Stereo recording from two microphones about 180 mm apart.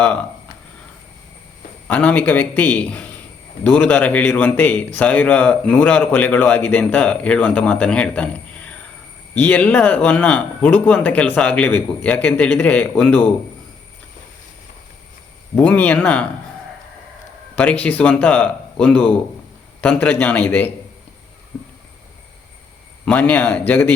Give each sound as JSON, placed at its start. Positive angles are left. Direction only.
{"t": 1.9, "sound": "speech", "side_deg": 10}
{"t": 15.5, "sound": "speech", "side_deg": 10}
{"t": 17.5, "sound": "speech", "side_deg": 10}
{"t": 23.0, "sound": "speech", "side_deg": 10}